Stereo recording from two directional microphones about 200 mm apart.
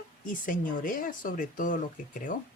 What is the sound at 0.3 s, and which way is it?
Speech, 40° left (ahead or behind).